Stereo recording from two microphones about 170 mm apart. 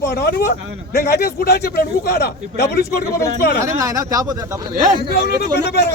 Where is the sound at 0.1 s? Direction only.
75° left (ahead or behind).